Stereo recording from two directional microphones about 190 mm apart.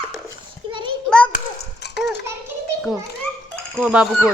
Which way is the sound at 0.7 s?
25° right (ahead or behind).